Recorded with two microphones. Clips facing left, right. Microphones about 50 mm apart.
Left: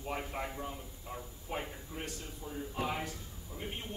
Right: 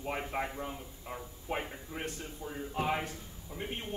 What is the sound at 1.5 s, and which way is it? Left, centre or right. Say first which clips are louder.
A man's voice: right 3 dB; right.